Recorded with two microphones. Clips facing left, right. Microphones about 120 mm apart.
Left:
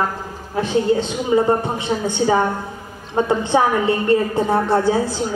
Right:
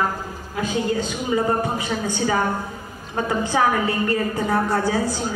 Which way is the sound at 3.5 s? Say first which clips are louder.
Left 4 dB; 25° left (ahead or behind).